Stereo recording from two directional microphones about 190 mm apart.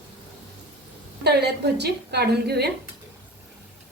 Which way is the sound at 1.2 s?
60° right (ahead or behind).